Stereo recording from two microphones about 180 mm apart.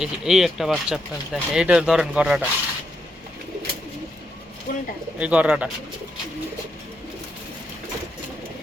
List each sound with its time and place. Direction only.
0.0 s speech: centre (ahead or behind)
4.7 s speech: 50° left (ahead or behind)
5.2 s speech: 5° right (ahead or behind)